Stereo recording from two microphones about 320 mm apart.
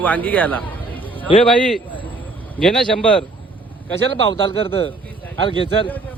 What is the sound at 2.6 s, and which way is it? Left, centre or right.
Speech, centre.